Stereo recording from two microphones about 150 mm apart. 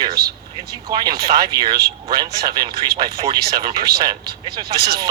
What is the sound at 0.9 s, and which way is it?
Speech, 25° right (ahead or behind).